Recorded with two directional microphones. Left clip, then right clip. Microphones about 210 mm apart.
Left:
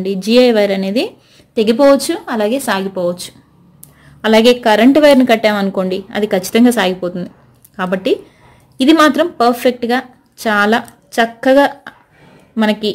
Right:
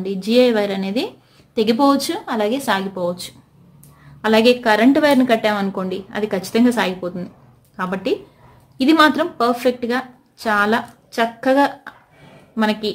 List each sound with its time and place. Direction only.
0.0 s a woman's voice: 20° left (ahead or behind)